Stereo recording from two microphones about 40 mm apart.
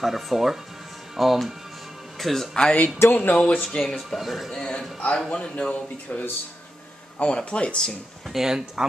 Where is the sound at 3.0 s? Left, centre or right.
Left.